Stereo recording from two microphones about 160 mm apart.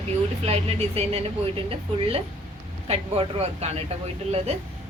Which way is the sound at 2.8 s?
40° right (ahead or behind).